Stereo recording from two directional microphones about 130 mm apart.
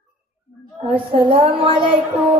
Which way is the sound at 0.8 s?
45° right (ahead or behind).